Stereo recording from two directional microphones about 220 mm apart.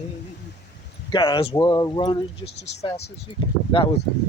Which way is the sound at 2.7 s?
50° left (ahead or behind).